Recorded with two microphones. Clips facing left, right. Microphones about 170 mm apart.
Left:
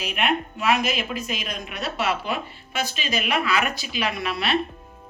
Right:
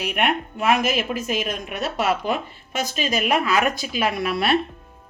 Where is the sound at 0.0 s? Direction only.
55° right (ahead or behind).